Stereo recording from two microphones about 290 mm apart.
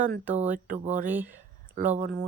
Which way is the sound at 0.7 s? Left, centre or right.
Right.